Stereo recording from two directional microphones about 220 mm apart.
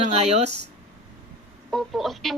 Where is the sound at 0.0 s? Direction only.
30° right (ahead or behind).